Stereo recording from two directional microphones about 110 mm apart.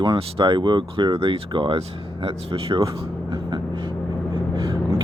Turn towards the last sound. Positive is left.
turn(degrees=-50)  # may be behind; listen again after turning